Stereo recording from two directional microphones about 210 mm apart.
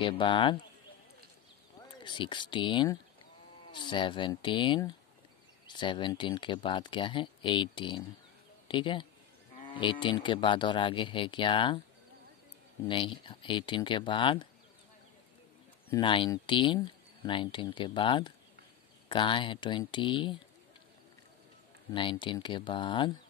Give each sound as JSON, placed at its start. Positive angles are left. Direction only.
{"t": 0.0, "sound": "speech", "side_deg": 25}
{"t": 1.8, "sound": "speech", "side_deg": 20}
{"t": 12.8, "sound": "speech", "side_deg": 25}
{"t": 15.9, "sound": "speech", "side_deg": 25}
{"t": 21.9, "sound": "speech", "side_deg": 25}